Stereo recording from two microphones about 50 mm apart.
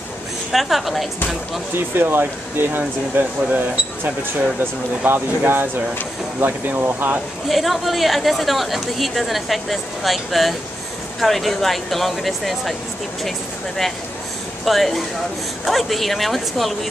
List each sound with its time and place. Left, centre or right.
0.5 s a woman's voice: centre
2.0 s speech: right
7.4 s a woman's voice: centre
14.6 s a woman's voice: centre